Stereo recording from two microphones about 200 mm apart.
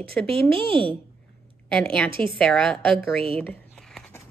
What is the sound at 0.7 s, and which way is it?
Speech, 25° right (ahead or behind).